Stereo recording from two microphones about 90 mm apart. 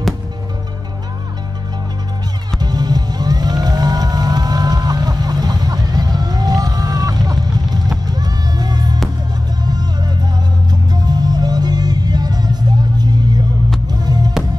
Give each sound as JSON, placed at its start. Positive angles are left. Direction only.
{"t": 2.6, "sound": "music", "side_deg": -50}